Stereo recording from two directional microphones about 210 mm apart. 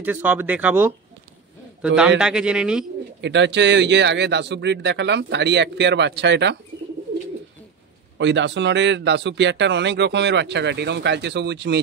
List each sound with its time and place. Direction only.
0.0 s speech: 10° right (ahead or behind)
3.2 s speech: 55° right (ahead or behind)
8.2 s speech: 60° right (ahead or behind)